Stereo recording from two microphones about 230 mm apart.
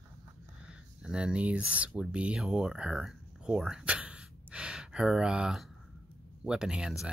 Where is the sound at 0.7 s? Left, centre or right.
Centre.